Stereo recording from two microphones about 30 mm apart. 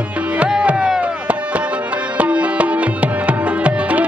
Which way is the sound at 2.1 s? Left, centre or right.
Right.